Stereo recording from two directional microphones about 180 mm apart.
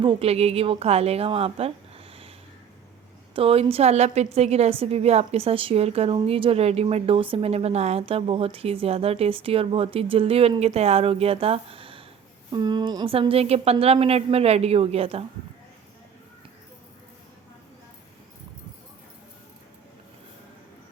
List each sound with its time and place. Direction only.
0.0 s a woman's voice: 30° right (ahead or behind)
3.3 s a woman's voice: 30° right (ahead or behind)